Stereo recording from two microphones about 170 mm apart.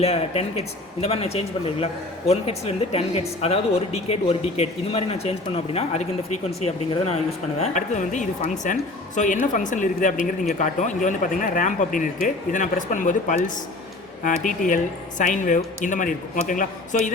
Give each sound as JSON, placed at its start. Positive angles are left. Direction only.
{"t": 0.0, "sound": "a man's voice", "side_deg": 35}